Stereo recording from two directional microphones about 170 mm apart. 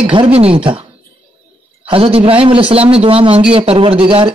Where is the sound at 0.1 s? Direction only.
30° right (ahead or behind).